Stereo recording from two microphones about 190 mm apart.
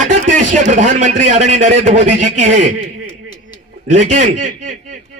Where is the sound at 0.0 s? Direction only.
40° right (ahead or behind).